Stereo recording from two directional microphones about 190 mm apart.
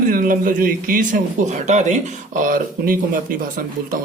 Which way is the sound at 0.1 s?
45° right (ahead or behind).